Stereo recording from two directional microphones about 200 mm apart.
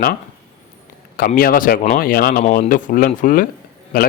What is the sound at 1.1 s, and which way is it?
A man's voice, 45° left (ahead or behind).